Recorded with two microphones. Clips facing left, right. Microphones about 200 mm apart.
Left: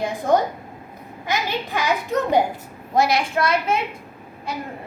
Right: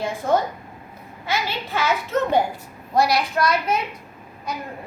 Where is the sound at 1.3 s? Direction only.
15° left (ahead or behind).